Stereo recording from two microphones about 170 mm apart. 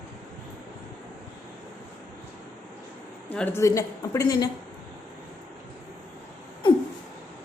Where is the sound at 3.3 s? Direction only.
10° left (ahead or behind).